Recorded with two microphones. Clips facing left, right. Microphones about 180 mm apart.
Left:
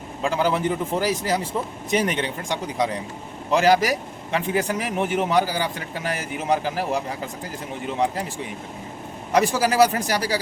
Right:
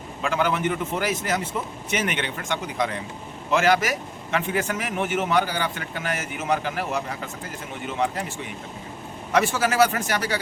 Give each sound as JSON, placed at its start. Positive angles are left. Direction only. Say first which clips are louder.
{"t": 0.2, "sound": "a man's voice", "louder": "left 2 dB", "side_deg": 35}
{"t": 9.3, "sound": "a man's voice", "louder": "left 2 dB", "side_deg": 35}